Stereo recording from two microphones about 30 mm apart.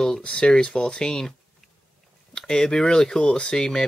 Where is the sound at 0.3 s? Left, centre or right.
Left.